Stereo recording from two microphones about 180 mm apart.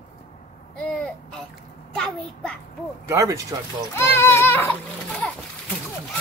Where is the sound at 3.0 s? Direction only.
15° right (ahead or behind).